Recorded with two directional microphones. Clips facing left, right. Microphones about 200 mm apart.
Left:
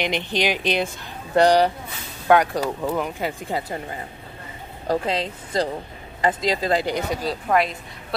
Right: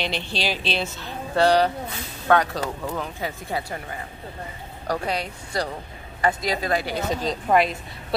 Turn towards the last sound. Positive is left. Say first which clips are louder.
# right 1 dB
turn(degrees=0)  # may be behind; listen again after turning